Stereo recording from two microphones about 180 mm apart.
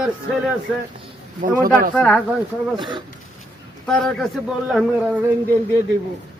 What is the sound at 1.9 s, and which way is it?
Speech, 5° left (ahead or behind).